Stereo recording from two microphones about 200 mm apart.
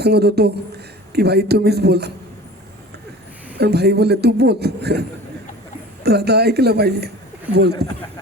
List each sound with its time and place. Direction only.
0.0 s a woman's voice: 55° right (ahead or behind)
3.6 s a man's voice: 55° right (ahead or behind)